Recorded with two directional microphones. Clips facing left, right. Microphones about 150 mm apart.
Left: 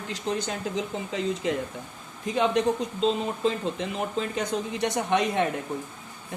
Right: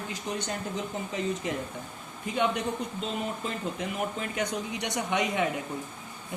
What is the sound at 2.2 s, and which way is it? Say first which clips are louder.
Speech: left 4 dB; 90° left.